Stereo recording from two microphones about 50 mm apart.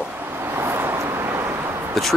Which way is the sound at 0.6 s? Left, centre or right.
Right.